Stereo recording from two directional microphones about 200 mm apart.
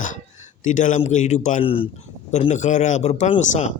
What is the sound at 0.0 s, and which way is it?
A man's voice, 40° left (ahead or behind).